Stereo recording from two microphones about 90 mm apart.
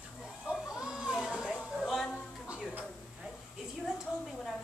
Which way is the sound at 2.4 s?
10° right (ahead or behind).